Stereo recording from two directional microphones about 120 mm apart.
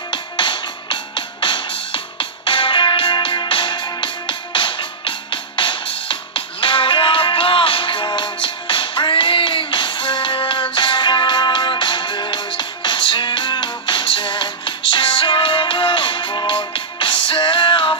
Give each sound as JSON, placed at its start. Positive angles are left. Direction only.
{"t": 0.1, "sound": "music", "side_deg": 40}